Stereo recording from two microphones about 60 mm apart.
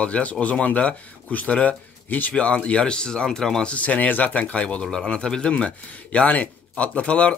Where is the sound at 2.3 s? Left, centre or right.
Centre.